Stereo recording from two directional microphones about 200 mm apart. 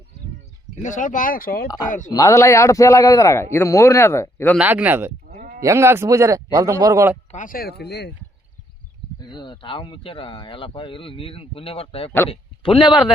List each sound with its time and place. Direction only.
0.8 s speech: 40° left (ahead or behind)
2.0 s a man's voice: 20° left (ahead or behind)
4.5 s speech: 5° right (ahead or behind)
5.3 s sheep: 45° right (ahead or behind)
5.6 s speech: 15° right (ahead or behind)
7.3 s speech: 40° left (ahead or behind)
9.2 s speech: 20° left (ahead or behind)